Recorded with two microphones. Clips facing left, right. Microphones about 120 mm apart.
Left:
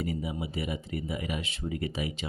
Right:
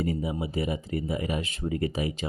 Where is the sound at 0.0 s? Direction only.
40° right (ahead or behind).